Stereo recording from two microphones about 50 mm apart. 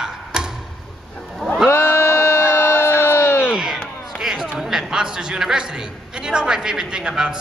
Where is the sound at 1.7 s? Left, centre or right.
Left.